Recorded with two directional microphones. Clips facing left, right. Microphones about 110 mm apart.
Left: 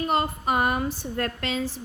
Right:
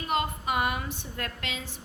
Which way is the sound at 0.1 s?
40° left (ahead or behind).